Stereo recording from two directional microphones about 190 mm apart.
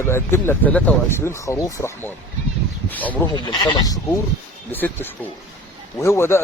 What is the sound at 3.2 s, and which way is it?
Speech, 25° left (ahead or behind).